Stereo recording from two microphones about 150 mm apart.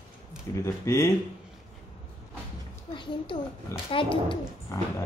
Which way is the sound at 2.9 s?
30° left (ahead or behind).